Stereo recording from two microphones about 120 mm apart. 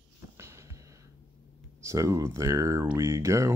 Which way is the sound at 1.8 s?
25° right (ahead or behind).